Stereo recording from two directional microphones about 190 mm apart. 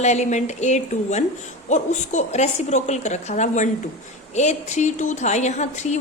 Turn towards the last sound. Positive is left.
turn(degrees=35)  # may be behind; listen again after turning